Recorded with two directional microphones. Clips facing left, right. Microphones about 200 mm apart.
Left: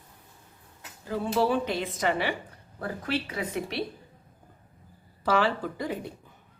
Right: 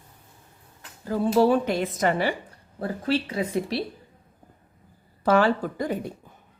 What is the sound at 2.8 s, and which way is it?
A woman's voice, 30° right (ahead or behind).